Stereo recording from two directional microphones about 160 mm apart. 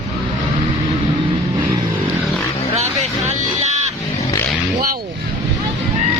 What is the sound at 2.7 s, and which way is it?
Vehicle, 45° right (ahead or behind).